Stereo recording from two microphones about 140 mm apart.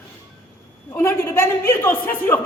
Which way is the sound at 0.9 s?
20° left (ahead or behind).